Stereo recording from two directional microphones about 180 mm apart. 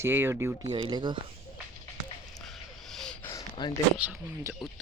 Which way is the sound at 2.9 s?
Centre (ahead or behind).